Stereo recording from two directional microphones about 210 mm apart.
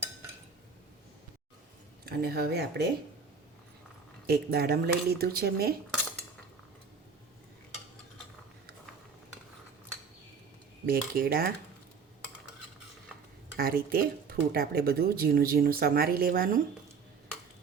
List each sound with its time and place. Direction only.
2.0 s speech: 50° right (ahead or behind)
4.3 s speech: 50° right (ahead or behind)
10.8 s speech: 45° right (ahead or behind)
13.6 s speech: 45° right (ahead or behind)